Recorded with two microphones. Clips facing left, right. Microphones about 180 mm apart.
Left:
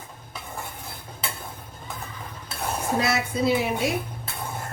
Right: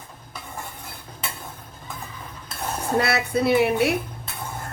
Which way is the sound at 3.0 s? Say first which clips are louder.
Right 3 dB; 65° right (ahead or behind).